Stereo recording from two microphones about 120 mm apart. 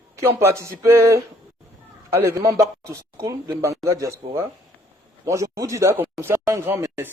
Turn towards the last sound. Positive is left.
turn(degrees=-20)  # may be behind; listen again after turning